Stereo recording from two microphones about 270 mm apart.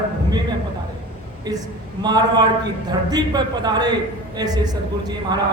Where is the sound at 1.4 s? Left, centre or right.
Centre.